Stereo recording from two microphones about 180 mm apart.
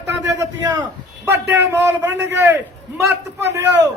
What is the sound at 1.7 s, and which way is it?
A man's voice, 15° right (ahead or behind).